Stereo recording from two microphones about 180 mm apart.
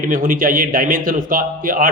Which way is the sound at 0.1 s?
50° right (ahead or behind).